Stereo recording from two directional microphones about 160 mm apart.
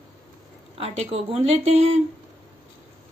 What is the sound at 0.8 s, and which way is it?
Speech, 40° right (ahead or behind).